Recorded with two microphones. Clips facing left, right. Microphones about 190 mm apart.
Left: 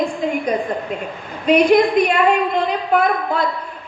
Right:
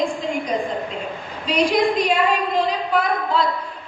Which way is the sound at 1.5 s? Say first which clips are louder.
Left 6 dB; 55° left (ahead or behind).